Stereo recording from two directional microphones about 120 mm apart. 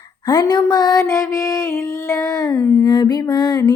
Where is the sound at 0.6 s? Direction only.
35° left (ahead or behind).